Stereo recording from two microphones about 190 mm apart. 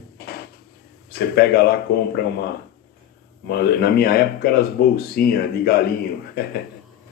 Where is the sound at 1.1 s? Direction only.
55° left (ahead or behind).